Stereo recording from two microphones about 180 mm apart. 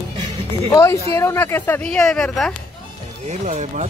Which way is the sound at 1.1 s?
15° left (ahead or behind).